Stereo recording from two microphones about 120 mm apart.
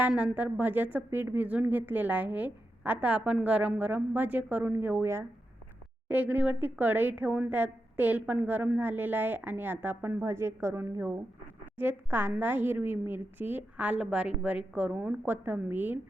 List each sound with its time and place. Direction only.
0.1 s a woman's voice: 10° right (ahead or behind)